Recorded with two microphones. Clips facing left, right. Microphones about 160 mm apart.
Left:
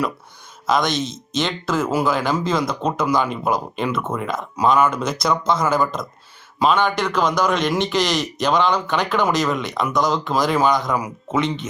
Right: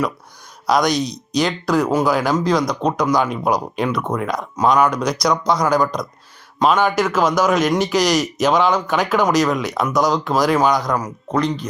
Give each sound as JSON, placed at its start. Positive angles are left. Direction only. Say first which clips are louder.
{"t": 0.7, "sound": "a man's voice", "louder": "right 3 dB", "side_deg": 0}